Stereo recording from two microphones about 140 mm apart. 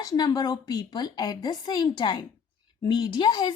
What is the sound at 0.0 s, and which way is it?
A woman's voice, 25° left (ahead or behind).